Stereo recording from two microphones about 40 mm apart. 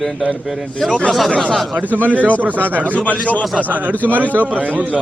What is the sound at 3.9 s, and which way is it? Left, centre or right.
Speech, left.